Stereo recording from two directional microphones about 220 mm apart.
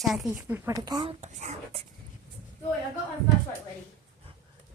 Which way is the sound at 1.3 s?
30° right (ahead or behind).